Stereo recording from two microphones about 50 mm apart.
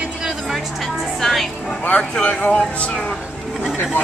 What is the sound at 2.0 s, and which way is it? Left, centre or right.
A man's voice, centre.